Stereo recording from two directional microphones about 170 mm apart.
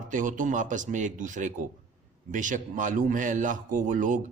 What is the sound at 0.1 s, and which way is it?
A man's voice, 50° right (ahead or behind).